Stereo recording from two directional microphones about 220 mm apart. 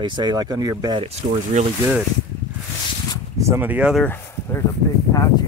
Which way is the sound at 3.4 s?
10° right (ahead or behind).